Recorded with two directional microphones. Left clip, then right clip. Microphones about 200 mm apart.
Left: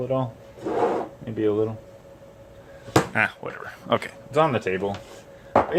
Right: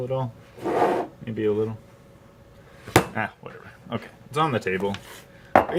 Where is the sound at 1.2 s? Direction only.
15° left (ahead or behind).